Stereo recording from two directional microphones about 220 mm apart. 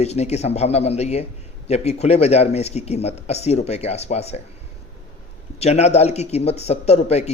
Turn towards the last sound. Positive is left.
turn(degrees=30)  # may be behind; listen again after turning